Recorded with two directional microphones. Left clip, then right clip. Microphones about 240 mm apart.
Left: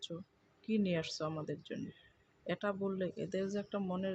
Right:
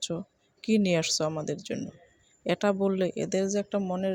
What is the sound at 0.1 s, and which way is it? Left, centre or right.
Speech, right.